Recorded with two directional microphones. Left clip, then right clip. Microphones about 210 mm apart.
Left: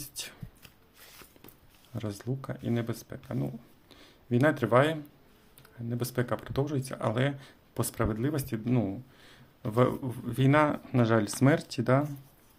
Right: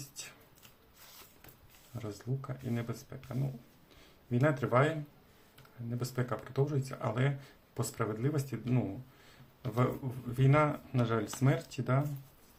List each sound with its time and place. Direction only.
2.0 s speech: 45° left (ahead or behind)
4.3 s speech: 45° left (ahead or behind)
6.0 s speech: 40° left (ahead or behind)